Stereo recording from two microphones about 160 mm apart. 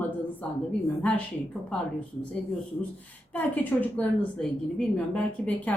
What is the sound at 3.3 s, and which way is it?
A woman's voice, 10° left (ahead or behind).